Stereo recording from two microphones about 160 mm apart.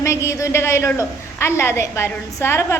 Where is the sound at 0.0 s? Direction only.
20° left (ahead or behind).